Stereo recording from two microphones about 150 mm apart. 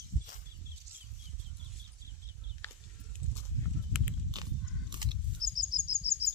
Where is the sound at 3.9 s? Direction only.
Centre (ahead or behind).